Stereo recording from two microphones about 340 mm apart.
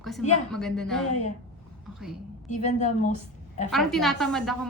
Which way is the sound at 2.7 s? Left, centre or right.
Left.